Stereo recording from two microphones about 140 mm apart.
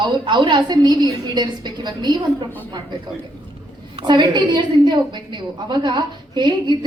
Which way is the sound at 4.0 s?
35° right (ahead or behind).